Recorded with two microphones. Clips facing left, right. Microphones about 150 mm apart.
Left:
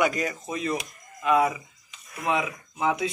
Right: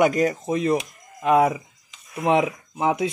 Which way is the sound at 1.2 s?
50° right (ahead or behind).